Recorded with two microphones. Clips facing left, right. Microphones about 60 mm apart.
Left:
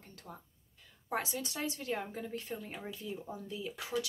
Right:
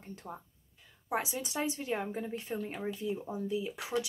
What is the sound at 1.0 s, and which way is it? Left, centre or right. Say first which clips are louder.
Speech: right 2 dB; centre.